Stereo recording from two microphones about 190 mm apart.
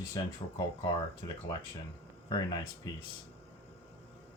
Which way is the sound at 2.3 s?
20° left (ahead or behind).